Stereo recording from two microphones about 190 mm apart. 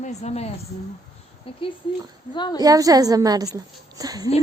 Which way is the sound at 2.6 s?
20° right (ahead or behind).